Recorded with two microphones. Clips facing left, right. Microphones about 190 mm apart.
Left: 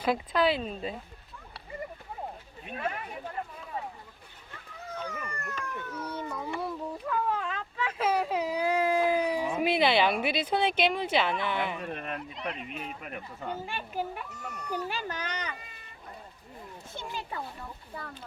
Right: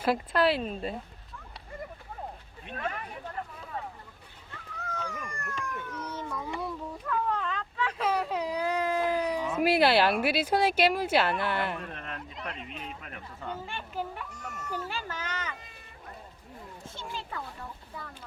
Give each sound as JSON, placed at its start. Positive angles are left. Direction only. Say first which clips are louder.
{"t": 0.0, "sound": "speech", "louder": "right 1 dB", "side_deg": -5}
{"t": 2.6, "sound": "a child's voice", "louder": "left 1 dB", "side_deg": 5}
{"t": 5.0, "sound": "a sound", "louder": "left 1 dB", "side_deg": 5}
{"t": 9.6, "sound": "speech", "louder": "right 3 dB", "side_deg": -5}
{"t": 11.8, "sound": "a child's voice", "louder": "left 4 dB", "side_deg": 15}
{"t": 17.0, "sound": "speech", "louder": "left 1 dB", "side_deg": 20}